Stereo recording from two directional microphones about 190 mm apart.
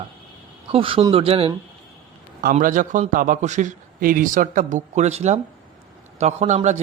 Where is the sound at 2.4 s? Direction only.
45° right (ahead or behind).